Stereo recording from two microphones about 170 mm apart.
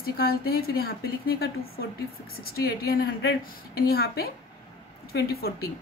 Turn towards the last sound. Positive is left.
turn(degrees=65)  # may be behind; listen again after turning